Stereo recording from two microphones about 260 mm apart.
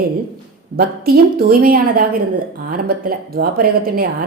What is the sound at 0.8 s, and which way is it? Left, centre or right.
Speech, right.